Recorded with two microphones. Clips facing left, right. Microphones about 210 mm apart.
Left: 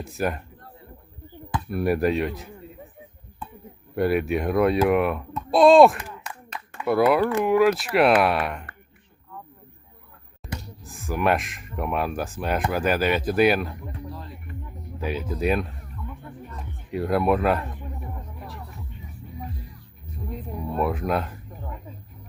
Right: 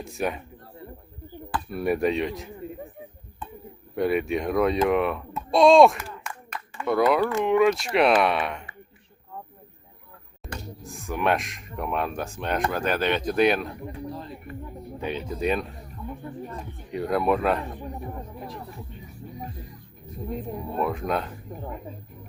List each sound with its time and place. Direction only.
0.0 s speech: centre (ahead or behind)
1.7 s speech: centre (ahead or behind)
3.9 s speech: 5° left (ahead or behind)
10.4 s speech: centre (ahead or behind)
14.9 s speech: 5° left (ahead or behind)
16.0 s a sound: 40° right (ahead or behind)
16.9 s speech: centre (ahead or behind)
20.7 s speech: centre (ahead or behind)